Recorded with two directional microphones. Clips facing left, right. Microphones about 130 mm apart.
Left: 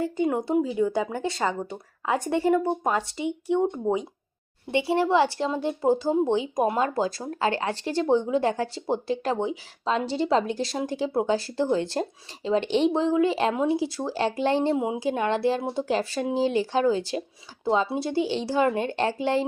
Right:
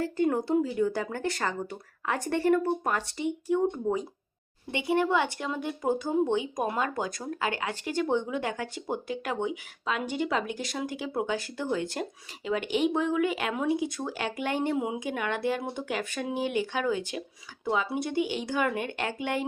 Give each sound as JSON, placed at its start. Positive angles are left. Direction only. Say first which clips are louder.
{"t": 0.0, "sound": "speech", "louder": "left 2 dB", "side_deg": 20}